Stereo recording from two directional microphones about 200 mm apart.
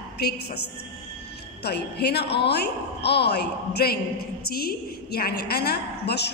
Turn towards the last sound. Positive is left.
turn(degrees=55)  # may be behind; listen again after turning